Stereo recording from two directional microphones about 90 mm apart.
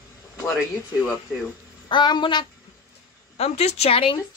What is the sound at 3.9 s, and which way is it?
Speech, 80° left.